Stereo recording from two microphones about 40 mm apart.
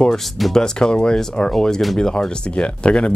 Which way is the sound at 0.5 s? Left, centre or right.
Centre.